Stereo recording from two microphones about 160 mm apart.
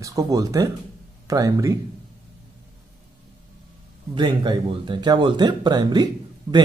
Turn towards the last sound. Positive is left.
turn(degrees=-25)  # may be behind; listen again after turning